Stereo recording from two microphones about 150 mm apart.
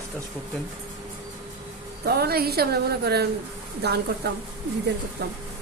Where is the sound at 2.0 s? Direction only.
90° right.